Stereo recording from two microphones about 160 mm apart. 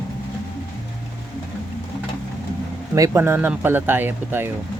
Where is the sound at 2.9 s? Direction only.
20° right (ahead or behind).